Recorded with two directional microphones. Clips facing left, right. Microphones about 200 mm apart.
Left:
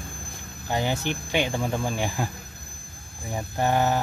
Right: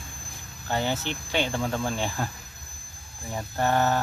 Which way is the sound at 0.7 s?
15° left (ahead or behind).